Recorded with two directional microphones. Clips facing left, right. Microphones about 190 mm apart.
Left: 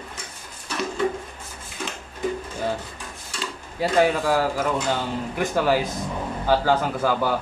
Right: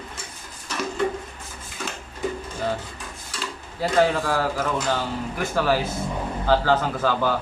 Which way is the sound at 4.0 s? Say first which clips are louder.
Left 1 dB; 15° left (ahead or behind).